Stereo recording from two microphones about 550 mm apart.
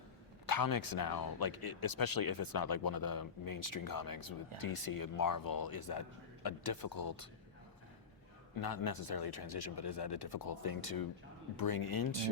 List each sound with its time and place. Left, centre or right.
0.4 s speech: left
8.5 s speech: left